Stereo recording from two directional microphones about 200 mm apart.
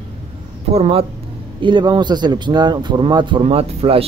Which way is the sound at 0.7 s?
30° right (ahead or behind).